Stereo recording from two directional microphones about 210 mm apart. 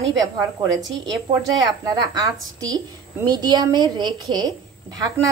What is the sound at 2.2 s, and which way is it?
A woman's voice, 15° right (ahead or behind).